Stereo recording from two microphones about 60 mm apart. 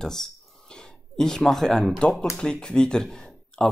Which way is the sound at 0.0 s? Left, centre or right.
Centre.